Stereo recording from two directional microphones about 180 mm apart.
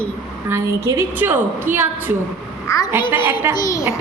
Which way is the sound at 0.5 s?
15° right (ahead or behind).